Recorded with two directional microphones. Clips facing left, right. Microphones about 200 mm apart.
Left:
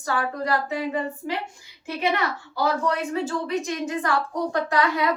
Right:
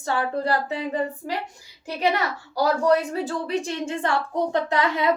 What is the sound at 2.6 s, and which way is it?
A woman's voice, 35° right (ahead or behind).